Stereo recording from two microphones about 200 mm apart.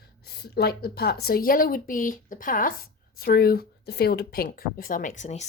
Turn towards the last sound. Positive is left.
turn(degrees=35)  # may be behind; listen again after turning